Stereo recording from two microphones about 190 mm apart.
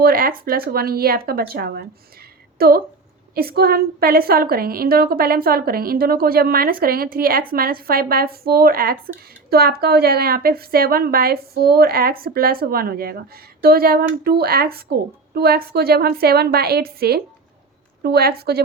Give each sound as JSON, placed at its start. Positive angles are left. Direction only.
{"t": 0.0, "sound": "a woman's voice", "side_deg": -50}